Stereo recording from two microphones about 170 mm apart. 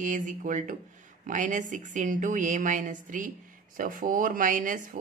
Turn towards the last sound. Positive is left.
turn(degrees=-50)  # may be behind; listen again after turning